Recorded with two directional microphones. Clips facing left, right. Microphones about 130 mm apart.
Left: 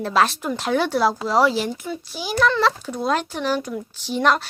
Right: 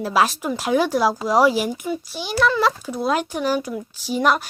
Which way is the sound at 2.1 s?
Centre (ahead or behind).